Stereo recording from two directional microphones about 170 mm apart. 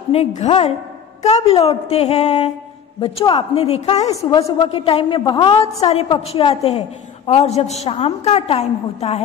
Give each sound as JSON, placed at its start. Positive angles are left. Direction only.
{"t": 0.1, "sound": "a woman's voice", "side_deg": 40}
{"t": 4.1, "sound": "a woman's voice", "side_deg": 20}
{"t": 4.6, "sound": "a woman's voice", "side_deg": 35}